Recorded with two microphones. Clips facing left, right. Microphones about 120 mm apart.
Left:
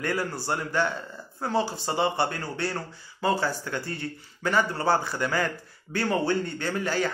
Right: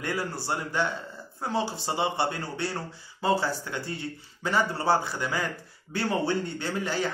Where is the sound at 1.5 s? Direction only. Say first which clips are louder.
Left 2 dB; 20° right (ahead or behind).